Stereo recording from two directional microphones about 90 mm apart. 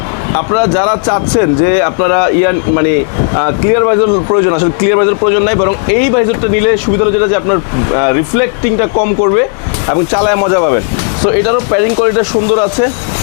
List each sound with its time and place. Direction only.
0.3 s speech: 20° left (ahead or behind)